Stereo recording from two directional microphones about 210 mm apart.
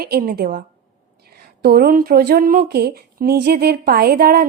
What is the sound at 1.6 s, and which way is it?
Speech, 50° right (ahead or behind).